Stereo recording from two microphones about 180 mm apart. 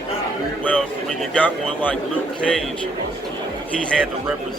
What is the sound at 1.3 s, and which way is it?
Speech, 10° left (ahead or behind).